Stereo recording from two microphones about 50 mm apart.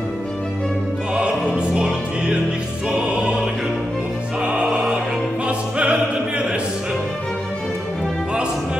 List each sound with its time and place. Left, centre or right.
1.1 s music: centre
5.8 s opera: right